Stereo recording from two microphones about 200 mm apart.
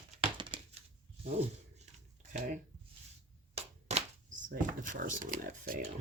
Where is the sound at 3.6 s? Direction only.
35° right (ahead or behind).